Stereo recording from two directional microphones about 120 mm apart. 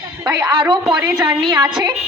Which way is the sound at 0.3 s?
30° right (ahead or behind).